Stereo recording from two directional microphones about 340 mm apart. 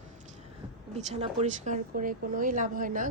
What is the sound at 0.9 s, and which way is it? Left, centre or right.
Speech, centre.